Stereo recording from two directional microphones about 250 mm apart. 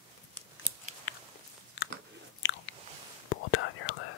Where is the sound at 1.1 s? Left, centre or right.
Left.